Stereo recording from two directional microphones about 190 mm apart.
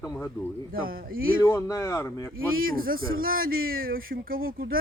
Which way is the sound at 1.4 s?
15° left (ahead or behind).